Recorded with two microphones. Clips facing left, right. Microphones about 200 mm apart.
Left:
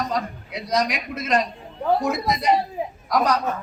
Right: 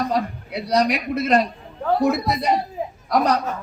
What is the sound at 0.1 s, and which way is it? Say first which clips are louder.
A man's voice: right 4 dB; 35° right (ahead or behind).